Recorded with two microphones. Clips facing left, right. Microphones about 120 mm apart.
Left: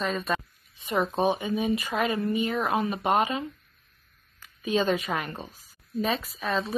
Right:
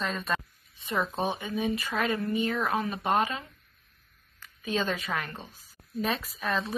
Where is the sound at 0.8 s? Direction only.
15° left (ahead or behind).